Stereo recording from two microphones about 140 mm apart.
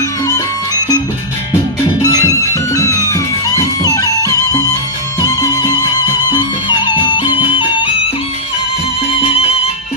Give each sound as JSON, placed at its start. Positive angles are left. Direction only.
{"t": 0.3, "sound": "music", "side_deg": 25}
{"t": 2.0, "sound": "music", "side_deg": 25}
{"t": 9.3, "sound": "music", "side_deg": 45}